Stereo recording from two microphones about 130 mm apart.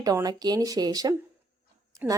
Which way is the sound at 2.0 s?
15° right (ahead or behind).